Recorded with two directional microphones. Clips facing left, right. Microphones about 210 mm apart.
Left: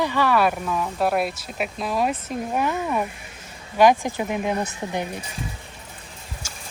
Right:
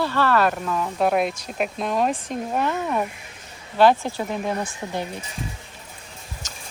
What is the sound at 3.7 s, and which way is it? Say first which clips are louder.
Speech: even; 15° left (ahead or behind).